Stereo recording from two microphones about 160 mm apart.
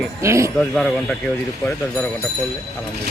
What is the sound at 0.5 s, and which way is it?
Speech, 5° left (ahead or behind).